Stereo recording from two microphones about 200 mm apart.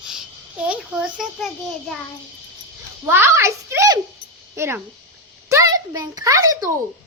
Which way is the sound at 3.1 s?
10° right (ahead or behind).